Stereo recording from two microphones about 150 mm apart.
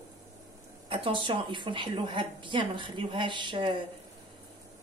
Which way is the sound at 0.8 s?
35° right (ahead or behind).